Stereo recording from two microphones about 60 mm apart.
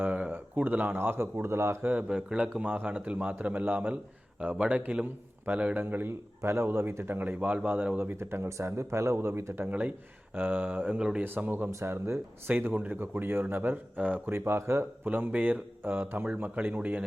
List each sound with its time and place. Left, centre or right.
0.3 s speech: right
1.8 s a man's voice: right
4.4 s a man's voice: centre
5.7 s speech: right
6.4 s speech: right
7.9 s speech: right
9.6 s a man's voice: right
10.9 s speech: centre
11.2 s speech: right
11.7 s speech: right
12.5 s speech: right
13.0 s speech: right
14.3 s speech: right
15.0 s speech: right